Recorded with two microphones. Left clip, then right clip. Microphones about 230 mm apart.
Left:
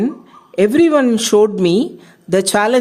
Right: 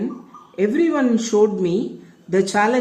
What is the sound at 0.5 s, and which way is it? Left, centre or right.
A woman's voice, left.